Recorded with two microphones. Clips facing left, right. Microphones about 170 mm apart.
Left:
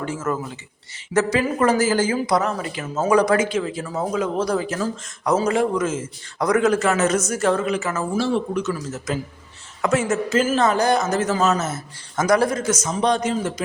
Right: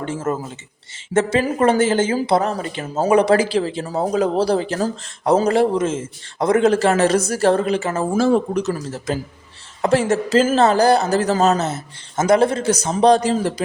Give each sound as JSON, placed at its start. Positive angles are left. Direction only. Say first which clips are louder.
{"t": 0.0, "sound": "speech", "louder": "right 2 dB", "side_deg": -30}
{"t": 8.1, "sound": "speech", "louder": "right 5 dB", "side_deg": -45}
{"t": 11.7, "sound": "speech", "louder": "right 2 dB", "side_deg": -25}